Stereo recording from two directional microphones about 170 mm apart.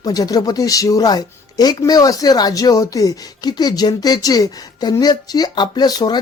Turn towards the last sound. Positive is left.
turn(degrees=25)  # may be behind; listen again after turning